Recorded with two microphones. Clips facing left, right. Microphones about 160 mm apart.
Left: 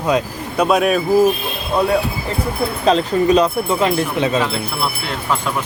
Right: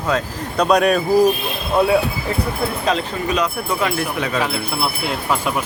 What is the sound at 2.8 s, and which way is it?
Speech, 35° left (ahead or behind).